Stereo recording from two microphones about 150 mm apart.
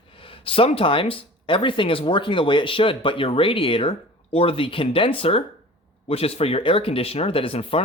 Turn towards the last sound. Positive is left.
turn(degrees=40)  # may be behind; listen again after turning